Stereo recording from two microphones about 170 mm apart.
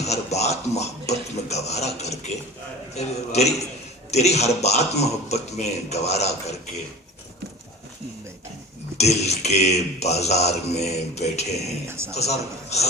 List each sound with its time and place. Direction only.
0.0 s speech: 40° left (ahead or behind)
9.0 s speech: 40° left (ahead or behind)
11.9 s a man's voice: 15° right (ahead or behind)
12.1 s speech: 40° left (ahead or behind)